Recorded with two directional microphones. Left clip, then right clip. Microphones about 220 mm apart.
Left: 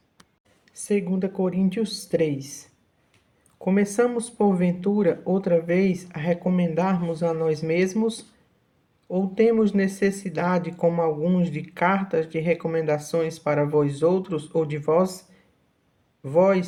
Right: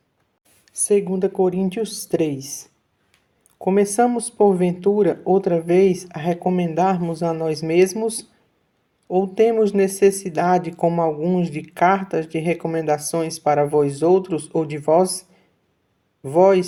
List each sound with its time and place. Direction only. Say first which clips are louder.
0.6 s speech: right 7 dB; 30° right (ahead or behind)
16.2 s speech: right 5 dB; 25° right (ahead or behind)